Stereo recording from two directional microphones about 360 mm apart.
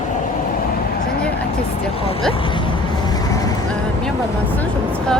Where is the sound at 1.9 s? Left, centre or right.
Centre.